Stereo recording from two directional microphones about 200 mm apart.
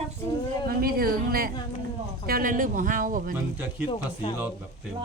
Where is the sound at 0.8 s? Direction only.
50° right (ahead or behind).